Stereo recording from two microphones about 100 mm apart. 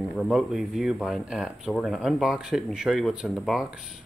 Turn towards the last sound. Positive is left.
turn(degrees=-5)  # may be behind; listen again after turning